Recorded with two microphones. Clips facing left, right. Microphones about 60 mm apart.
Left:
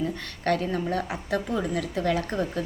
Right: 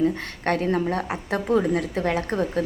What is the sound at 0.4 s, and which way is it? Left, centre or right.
A woman's voice, right.